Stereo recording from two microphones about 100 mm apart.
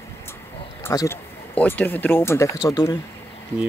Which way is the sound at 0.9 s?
35° left (ahead or behind).